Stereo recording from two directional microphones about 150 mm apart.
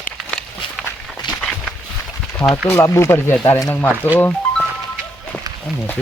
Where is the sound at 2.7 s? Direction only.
20° left (ahead or behind).